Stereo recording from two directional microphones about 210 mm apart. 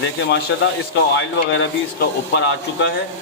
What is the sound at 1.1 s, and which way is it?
Speech, 60° left (ahead or behind).